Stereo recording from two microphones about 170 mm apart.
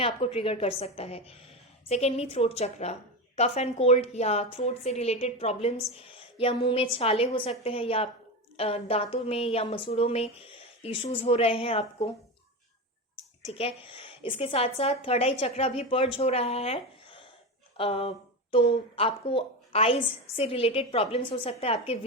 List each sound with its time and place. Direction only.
0.0 s a woman's voice: 35° left (ahead or behind)
13.5 s a woman's voice: 35° left (ahead or behind)